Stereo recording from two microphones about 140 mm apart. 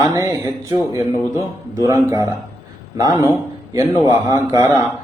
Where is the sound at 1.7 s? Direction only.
20° right (ahead or behind).